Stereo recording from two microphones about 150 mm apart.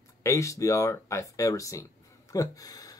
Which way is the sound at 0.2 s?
20° left (ahead or behind).